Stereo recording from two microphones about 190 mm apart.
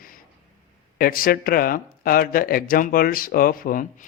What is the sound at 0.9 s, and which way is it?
Speech, 50° left (ahead or behind).